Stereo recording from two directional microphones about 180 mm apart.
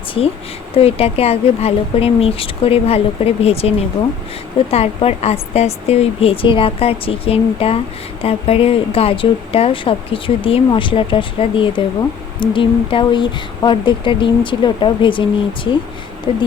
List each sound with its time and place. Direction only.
0.7 s speech: 35° left (ahead or behind)